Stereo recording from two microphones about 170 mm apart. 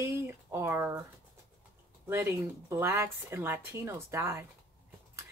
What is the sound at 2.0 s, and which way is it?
Speech, 15° right (ahead or behind).